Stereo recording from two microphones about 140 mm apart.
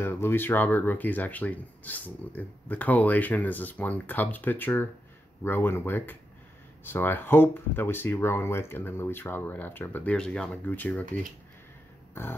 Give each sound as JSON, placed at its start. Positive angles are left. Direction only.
{"t": 0.0, "sound": "speech", "side_deg": 15}